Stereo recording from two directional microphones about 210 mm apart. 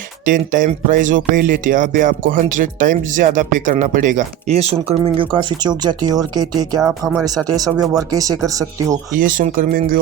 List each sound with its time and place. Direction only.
0.3 s speech: 40° right (ahead or behind); by 9.0 s 15° right (ahead or behind)
9.1 s speech: 40° right (ahead or behind)